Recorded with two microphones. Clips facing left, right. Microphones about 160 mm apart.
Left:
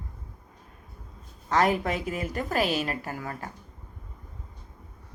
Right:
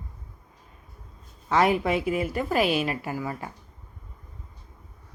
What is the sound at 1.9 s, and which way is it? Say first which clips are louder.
Speech: right 5 dB; 10° right (ahead or behind).